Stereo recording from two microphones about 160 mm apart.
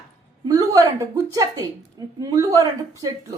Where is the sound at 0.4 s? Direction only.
20° right (ahead or behind).